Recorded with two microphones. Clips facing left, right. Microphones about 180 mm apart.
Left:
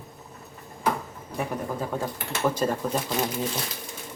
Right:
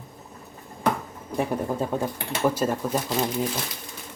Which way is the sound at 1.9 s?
20° right (ahead or behind).